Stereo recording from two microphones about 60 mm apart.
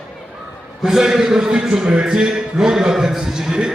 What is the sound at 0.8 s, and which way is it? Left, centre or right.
A man's voice, centre.